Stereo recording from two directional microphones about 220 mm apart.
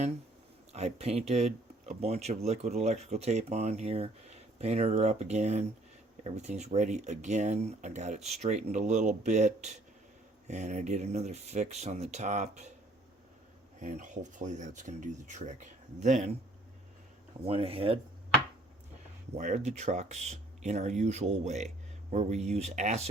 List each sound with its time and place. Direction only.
0.7 s speech: 30° right (ahead or behind)
13.7 s speech: 35° right (ahead or behind)
17.4 s speech: 25° right (ahead or behind)
19.4 s speech: 35° right (ahead or behind)